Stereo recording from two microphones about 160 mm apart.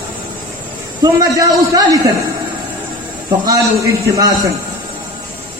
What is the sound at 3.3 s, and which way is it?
Speech, 25° right (ahead or behind).